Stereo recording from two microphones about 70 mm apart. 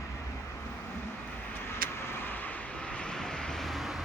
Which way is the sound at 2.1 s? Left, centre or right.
Left.